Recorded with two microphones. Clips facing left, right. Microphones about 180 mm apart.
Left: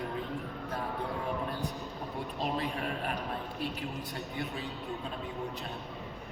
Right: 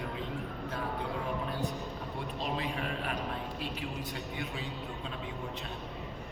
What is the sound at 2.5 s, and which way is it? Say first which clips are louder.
Speech: left 1 dB; 40° left (ahead or behind).